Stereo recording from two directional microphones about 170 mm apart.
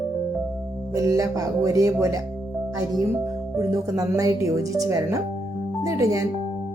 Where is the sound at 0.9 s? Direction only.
20° right (ahead or behind).